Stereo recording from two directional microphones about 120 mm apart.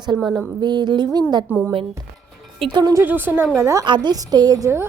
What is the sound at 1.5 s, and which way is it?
Speech, 15° right (ahead or behind).